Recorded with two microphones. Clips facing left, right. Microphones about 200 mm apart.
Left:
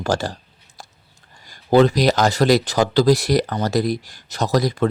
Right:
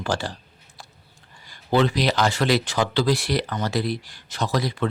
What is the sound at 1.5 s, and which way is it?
Speech, 40° left (ahead or behind).